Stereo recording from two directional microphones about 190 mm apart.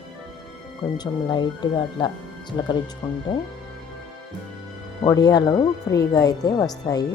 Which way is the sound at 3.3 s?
25° left (ahead or behind).